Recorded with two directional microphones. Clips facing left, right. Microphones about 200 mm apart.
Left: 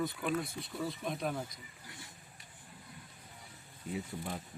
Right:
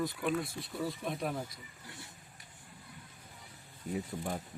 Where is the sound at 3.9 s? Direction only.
45° right (ahead or behind).